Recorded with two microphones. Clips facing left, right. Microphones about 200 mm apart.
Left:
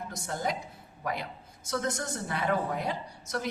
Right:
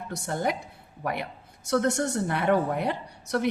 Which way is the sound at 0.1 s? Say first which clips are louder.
Right 6 dB; 60° right (ahead or behind).